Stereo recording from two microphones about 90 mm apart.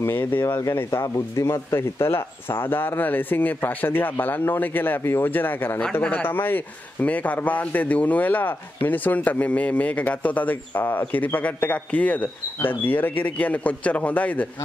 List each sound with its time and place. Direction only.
0.0 s a man's voice: 20° left (ahead or behind)